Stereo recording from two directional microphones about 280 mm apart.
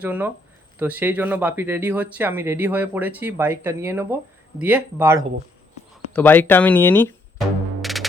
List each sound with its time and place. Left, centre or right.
0.0 s speech: centre
6.1 s speech: centre